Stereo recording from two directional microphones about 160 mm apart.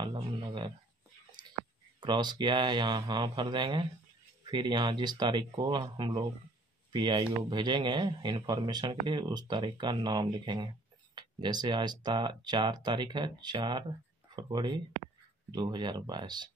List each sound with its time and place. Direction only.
0.0 s speech: 30° right (ahead or behind)
2.0 s speech: 30° right (ahead or behind)